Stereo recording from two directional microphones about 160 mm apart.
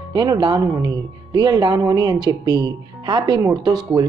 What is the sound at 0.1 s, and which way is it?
Speech, 25° right (ahead or behind).